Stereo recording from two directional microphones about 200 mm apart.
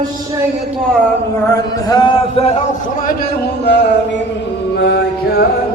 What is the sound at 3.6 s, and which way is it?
Music, 60° left (ahead or behind).